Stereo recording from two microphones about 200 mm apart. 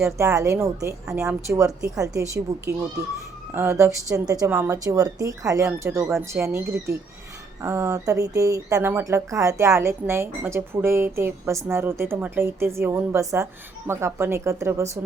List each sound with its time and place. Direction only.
0.0 s speech: 15° right (ahead or behind)
7.6 s speech: 15° right (ahead or behind)